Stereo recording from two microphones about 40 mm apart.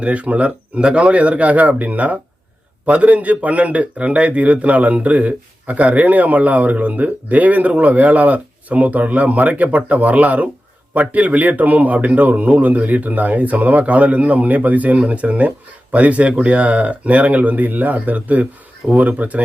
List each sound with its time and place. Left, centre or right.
0.0 s a man's voice: right